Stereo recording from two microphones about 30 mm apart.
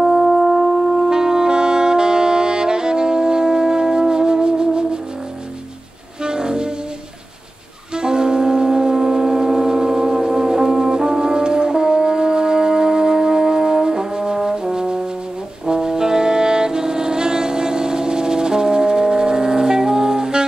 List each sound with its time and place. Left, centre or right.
0.0 s music: centre
1.1 s saxophone: right
6.2 s train: right
7.9 s music: right
13.8 s brass instrument: right
15.6 s saxophone: right